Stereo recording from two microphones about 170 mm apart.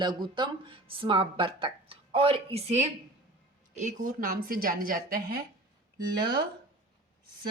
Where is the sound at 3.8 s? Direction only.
50° right (ahead or behind).